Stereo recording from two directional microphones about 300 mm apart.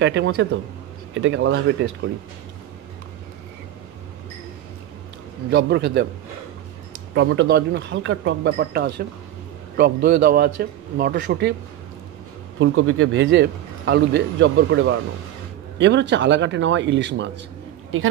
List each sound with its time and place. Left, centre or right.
0.0 s a man's voice: right
5.5 s a man's voice: right
7.2 s a man's voice: right
12.5 s a man's voice: right